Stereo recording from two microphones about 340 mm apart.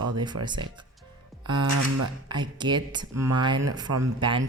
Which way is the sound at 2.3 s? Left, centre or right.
Centre.